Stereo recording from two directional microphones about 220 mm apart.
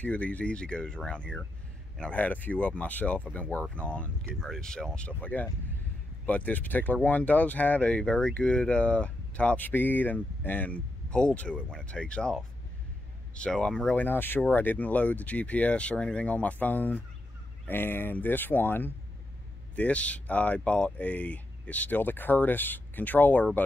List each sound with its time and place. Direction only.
0.0 s speech: 5° left (ahead or behind)